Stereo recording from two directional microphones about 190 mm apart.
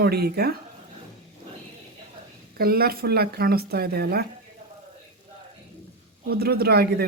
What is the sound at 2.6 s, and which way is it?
Speech, 55° right (ahead or behind).